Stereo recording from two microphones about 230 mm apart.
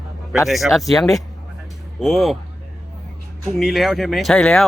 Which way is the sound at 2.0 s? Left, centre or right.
Centre.